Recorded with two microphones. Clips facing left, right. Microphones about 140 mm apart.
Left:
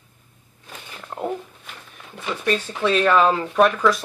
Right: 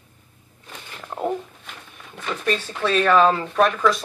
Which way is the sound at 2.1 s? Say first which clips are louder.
Left 1 dB; 5° left (ahead or behind).